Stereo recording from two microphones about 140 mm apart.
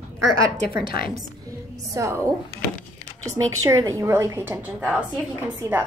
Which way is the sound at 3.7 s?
20° right (ahead or behind).